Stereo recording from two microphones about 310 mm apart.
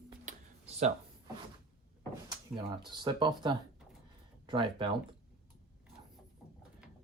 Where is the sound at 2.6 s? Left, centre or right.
Centre.